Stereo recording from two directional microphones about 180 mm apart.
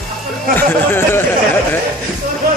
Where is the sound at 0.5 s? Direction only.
10° left (ahead or behind).